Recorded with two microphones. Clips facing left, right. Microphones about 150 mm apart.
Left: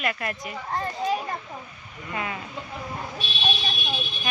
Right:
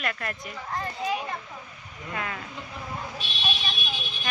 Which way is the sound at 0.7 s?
35° left (ahead or behind).